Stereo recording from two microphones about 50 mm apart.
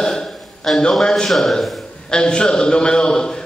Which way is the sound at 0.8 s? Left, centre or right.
Centre.